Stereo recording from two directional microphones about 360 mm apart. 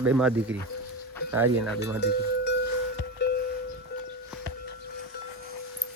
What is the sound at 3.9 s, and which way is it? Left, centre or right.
Music, left.